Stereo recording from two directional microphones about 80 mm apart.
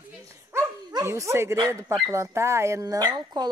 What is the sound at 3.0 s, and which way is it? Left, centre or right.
Speech, right.